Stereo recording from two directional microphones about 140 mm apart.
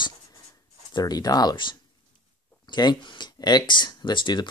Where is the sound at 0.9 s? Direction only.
30° left (ahead or behind).